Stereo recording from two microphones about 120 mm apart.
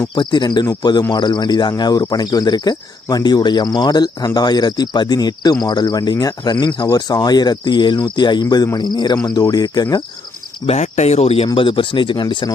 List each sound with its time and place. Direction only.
0.1 s speech: 40° left (ahead or behind)
10.7 s speech: 70° left (ahead or behind)
11.5 s speech: 45° left (ahead or behind)